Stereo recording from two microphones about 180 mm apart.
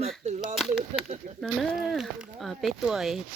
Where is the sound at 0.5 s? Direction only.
Centre (ahead or behind).